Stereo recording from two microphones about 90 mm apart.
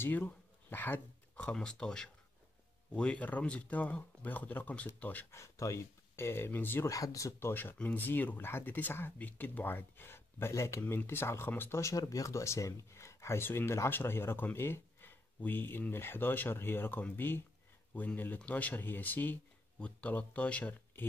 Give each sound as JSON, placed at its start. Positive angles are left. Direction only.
{"t": 0.0, "sound": "speech", "side_deg": 25}
{"t": 5.3, "sound": "speech", "side_deg": 35}
{"t": 6.9, "sound": "speech", "side_deg": 40}
{"t": 11.8, "sound": "speech", "side_deg": 40}